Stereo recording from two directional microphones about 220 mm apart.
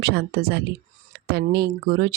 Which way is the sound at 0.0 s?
45° right (ahead or behind).